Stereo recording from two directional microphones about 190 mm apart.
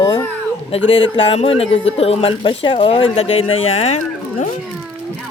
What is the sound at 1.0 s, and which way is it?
Speech, 25° left (ahead or behind).